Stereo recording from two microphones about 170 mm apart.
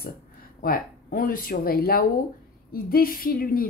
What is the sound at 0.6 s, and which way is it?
Speech, 55° left (ahead or behind).